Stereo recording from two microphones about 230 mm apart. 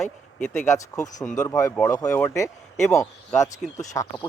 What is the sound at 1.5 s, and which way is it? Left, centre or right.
Speech, centre.